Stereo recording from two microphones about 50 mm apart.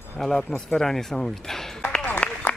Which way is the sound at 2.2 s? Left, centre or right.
Left.